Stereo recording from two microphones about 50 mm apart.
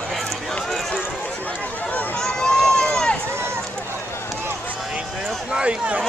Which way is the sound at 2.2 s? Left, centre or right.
Centre.